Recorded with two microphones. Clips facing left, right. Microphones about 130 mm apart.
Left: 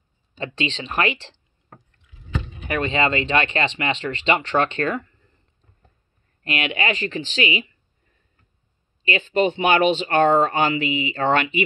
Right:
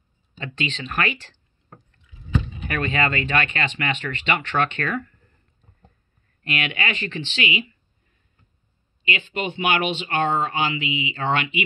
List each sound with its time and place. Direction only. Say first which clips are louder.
0.4 s speech: left 3 dB; 30° left (ahead or behind)
2.7 s speech: left 3 dB; 25° left (ahead or behind)
6.4 s speech: left 3 dB; 30° left (ahead or behind)
9.0 s speech: left 7 dB; 35° left (ahead or behind)